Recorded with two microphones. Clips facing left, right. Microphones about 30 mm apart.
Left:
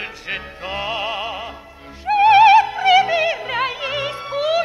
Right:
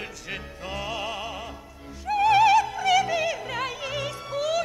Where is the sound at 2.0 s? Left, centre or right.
Left.